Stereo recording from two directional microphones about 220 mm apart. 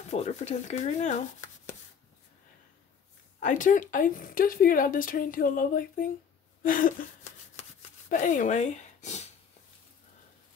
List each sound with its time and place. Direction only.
0.1 s speech: 30° left (ahead or behind)
3.3 s speech: 35° left (ahead or behind)
6.6 s a sound: 40° left (ahead or behind)
8.1 s speech: 35° left (ahead or behind)